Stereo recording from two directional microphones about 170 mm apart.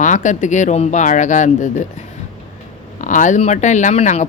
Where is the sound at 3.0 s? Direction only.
50° left (ahead or behind).